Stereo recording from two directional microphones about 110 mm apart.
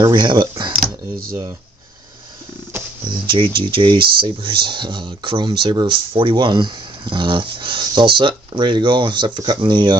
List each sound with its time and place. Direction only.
0.0 s speech: 40° right (ahead or behind)
3.1 s speech: 45° right (ahead or behind)